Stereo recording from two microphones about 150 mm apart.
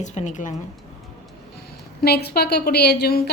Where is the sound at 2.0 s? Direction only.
90° left.